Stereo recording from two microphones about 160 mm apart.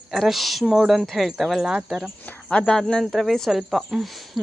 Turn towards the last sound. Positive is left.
turn(degrees=0)  # may be behind; listen again after turning